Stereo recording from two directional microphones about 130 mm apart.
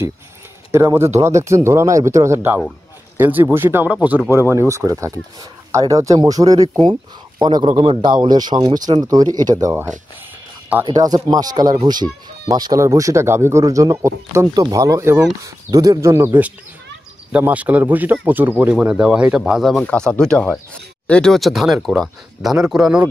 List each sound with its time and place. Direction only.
0.7 s speech: 20° right (ahead or behind)
7.6 s speech: 45° right (ahead or behind); by 9.8 s 25° right (ahead or behind)
10.9 s speech: 30° right (ahead or behind); by 19.8 s 5° right (ahead or behind)
19.8 s speech: 10° left (ahead or behind)